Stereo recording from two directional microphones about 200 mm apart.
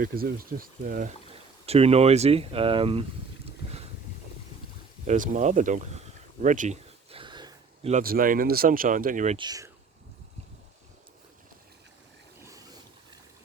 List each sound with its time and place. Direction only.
0.0 s speech: 45° right (ahead or behind)
1.6 s speech: 30° right (ahead or behind)
5.0 s speech: 40° right (ahead or behind)
6.4 s a sound: 40° right (ahead or behind); by 7.9 s 20° right (ahead or behind)
7.9 s speech: 45° right (ahead or behind)
9.4 s speech: 20° right (ahead or behind)
12.5 s a sound: 15° right (ahead or behind)